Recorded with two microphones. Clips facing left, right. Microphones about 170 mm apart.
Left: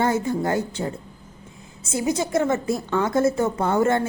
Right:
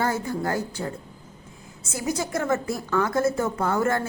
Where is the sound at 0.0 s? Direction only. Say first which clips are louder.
Left 4 dB; 25° left (ahead or behind).